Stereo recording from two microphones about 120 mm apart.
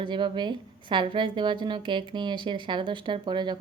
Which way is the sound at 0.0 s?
40° right (ahead or behind).